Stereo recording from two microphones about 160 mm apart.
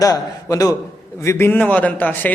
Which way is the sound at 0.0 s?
20° left (ahead or behind).